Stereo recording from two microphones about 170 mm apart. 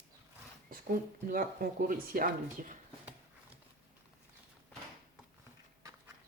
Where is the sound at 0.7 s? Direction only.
55° right (ahead or behind).